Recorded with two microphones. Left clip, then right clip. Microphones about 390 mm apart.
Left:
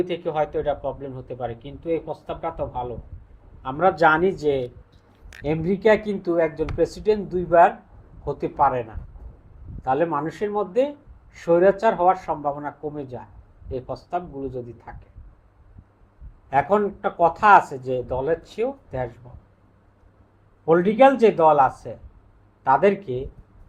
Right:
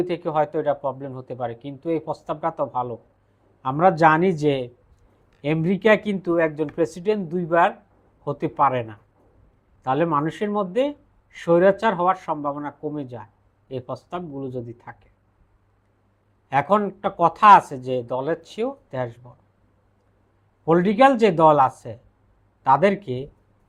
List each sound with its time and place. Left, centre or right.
0.0 s speech: right
5.4 s speech: right
16.5 s speech: right
20.7 s speech: right